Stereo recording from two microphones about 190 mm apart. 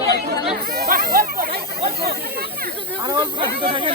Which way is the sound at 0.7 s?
55° right (ahead or behind).